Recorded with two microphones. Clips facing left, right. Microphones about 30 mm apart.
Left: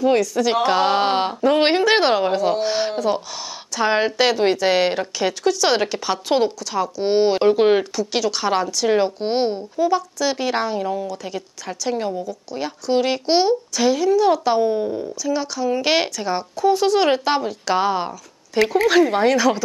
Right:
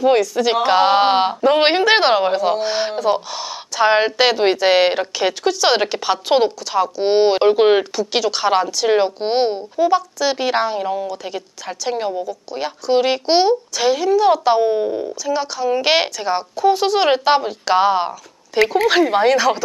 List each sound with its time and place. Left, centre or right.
0.0 s speech: centre